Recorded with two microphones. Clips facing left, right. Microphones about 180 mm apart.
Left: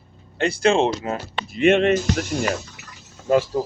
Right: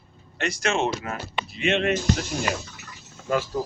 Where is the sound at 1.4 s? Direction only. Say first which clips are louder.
Left 8 dB; 50° left (ahead or behind).